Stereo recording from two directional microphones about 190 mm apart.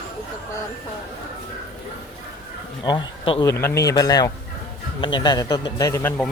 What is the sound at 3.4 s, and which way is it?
A man's voice, 15° left (ahead or behind).